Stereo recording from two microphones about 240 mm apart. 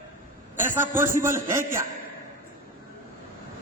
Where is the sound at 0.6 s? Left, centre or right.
Centre.